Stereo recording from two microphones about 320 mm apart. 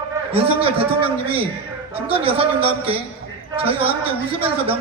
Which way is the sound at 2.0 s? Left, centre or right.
Centre.